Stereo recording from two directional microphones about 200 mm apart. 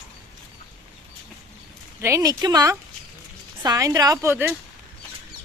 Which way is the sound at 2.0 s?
15° right (ahead or behind).